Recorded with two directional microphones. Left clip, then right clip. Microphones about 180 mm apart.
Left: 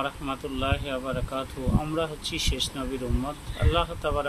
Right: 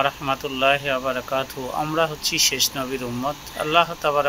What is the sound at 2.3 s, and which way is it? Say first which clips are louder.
Speech: right 9 dB; 35° right (ahead or behind).